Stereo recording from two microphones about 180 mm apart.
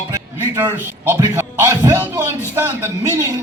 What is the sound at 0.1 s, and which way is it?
A man's voice, 15° right (ahead or behind).